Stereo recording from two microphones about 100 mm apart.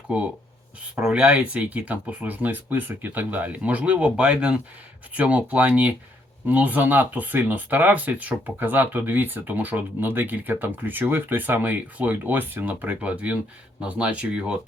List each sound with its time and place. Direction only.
0.9 s speech: 10° right (ahead or behind)